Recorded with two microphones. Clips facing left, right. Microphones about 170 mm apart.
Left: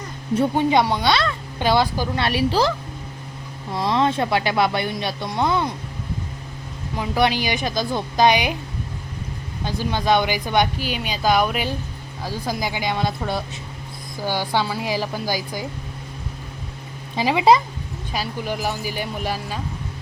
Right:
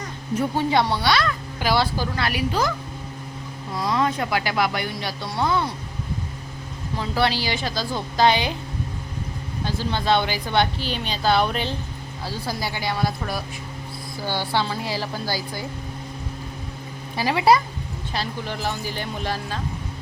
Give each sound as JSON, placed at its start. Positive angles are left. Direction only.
{"t": 0.5, "sound": "speech", "side_deg": 20}
{"t": 3.8, "sound": "speech", "side_deg": 25}
{"t": 6.9, "sound": "speech", "side_deg": 15}
{"t": 9.6, "sound": "speech", "side_deg": 15}
{"t": 17.2, "sound": "speech", "side_deg": 15}